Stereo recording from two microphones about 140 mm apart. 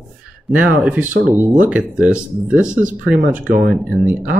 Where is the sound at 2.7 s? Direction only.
70° right (ahead or behind).